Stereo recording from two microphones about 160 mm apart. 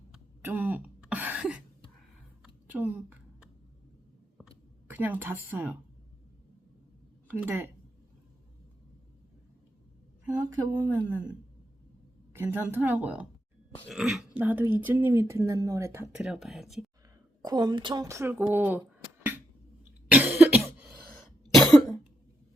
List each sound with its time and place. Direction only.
0.1 s a sound: 10° right (ahead or behind)
2.7 s speech: 10° right (ahead or behind)
4.9 s speech: 10° right (ahead or behind)
7.3 s a woman's voice: 15° right (ahead or behind)
10.2 s a woman's voice: 20° right (ahead or behind)
12.3 s speech: 15° right (ahead or behind)
16.1 s speech: 5° right (ahead or behind)
17.4 s a woman's voice: 25° right (ahead or behind)
20.1 s cough: 10° right (ahead or behind)
21.5 s cough: centre (ahead or behind)